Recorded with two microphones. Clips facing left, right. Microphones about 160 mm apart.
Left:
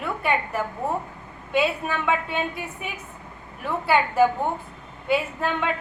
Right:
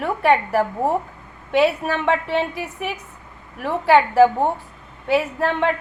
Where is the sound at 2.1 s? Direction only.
80° right.